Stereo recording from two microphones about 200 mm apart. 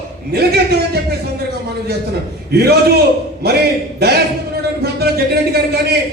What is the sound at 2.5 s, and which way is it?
Speech, 50° right (ahead or behind).